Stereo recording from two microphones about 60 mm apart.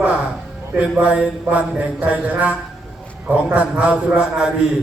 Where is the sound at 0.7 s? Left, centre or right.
Right.